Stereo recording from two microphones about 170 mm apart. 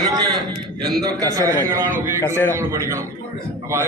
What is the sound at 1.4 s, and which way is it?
Speech, 15° right (ahead or behind).